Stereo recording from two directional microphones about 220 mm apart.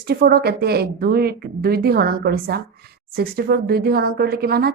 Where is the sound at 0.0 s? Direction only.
45° right (ahead or behind).